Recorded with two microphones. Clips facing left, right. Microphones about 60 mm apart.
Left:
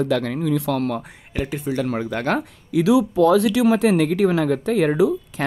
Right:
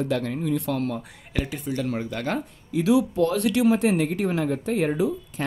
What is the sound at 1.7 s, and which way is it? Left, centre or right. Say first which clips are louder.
Speech: left 7 dB; left.